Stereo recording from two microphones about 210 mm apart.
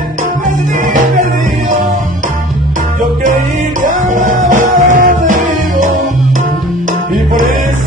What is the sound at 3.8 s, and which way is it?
Music, 40° right (ahead or behind).